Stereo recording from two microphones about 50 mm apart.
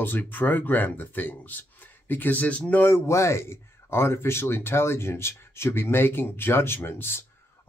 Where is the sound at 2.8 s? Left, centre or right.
Left.